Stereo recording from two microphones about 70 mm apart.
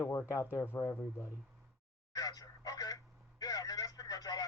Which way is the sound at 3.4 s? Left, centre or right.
Left.